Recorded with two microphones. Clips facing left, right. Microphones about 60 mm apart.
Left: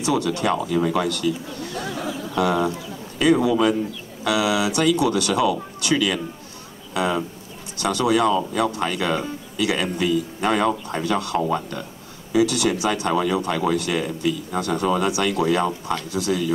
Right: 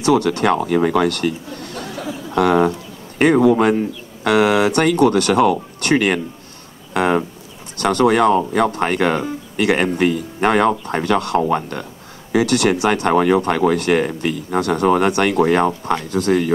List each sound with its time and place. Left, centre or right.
0.0 s speech: right